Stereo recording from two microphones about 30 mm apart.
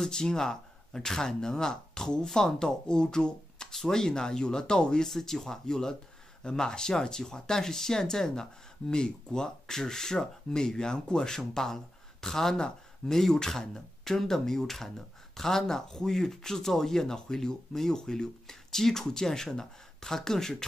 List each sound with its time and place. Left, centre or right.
0.1 s speech: centre
5.0 s speech: centre